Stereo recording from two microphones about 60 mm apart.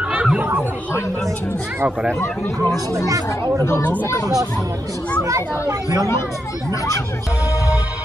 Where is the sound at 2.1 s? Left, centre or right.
Left.